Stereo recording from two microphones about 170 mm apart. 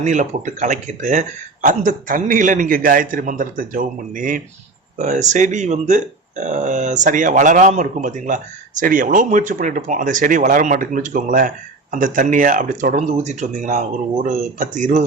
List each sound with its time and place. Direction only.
0.0 s speech: 45° right (ahead or behind)